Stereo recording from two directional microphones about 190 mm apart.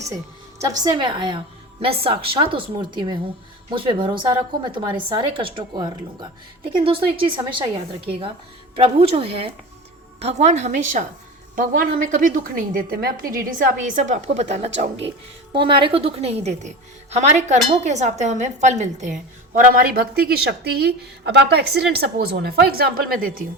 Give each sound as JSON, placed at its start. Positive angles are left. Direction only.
{"t": 0.6, "sound": "a woman's voice", "side_deg": -20}
{"t": 11.5, "sound": "a woman's voice", "side_deg": -50}
{"t": 15.5, "sound": "a woman's voice", "side_deg": -25}